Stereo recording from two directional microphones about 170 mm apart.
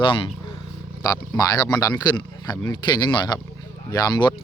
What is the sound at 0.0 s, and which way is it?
Speech, 30° left (ahead or behind).